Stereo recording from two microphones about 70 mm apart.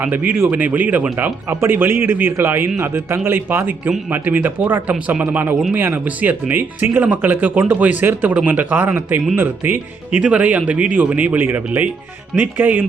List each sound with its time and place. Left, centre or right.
0.0 s a man's voice: right
10.2 s speech: centre